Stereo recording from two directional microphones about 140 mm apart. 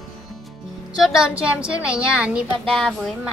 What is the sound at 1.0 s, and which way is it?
A woman's voice, 5° right (ahead or behind).